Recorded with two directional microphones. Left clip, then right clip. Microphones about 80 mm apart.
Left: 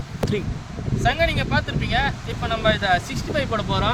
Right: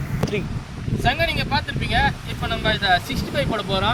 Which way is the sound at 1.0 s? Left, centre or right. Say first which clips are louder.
Even; left.